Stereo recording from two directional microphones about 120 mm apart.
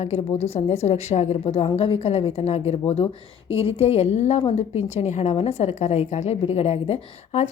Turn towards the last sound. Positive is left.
turn(degrees=60)  # may be behind; listen again after turning